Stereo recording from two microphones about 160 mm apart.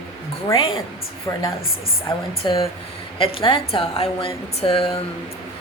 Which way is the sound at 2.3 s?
35° left (ahead or behind).